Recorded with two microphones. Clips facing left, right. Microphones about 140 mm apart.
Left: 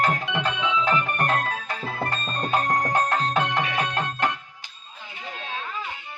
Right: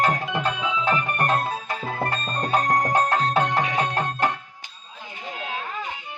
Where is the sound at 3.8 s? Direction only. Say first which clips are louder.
Right 2 dB; 45° right (ahead or behind).